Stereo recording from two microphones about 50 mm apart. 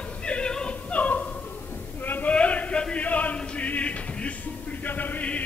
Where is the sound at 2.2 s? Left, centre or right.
Left.